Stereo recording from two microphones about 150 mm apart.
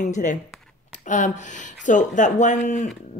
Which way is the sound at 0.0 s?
55° left (ahead or behind).